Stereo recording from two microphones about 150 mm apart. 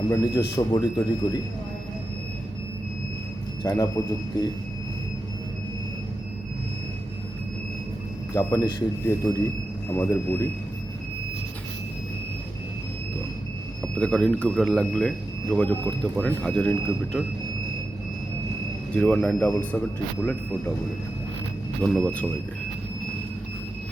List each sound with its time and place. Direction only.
0.1 s speech: 15° left (ahead or behind)
3.6 s speech: 25° left (ahead or behind)
8.3 s speech: 25° left (ahead or behind)
13.8 s speech: 5° left (ahead or behind)
18.9 s speech: 5° left (ahead or behind)
21.8 s speech: 5° left (ahead or behind)